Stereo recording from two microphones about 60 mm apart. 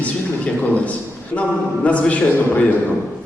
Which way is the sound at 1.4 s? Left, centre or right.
Left.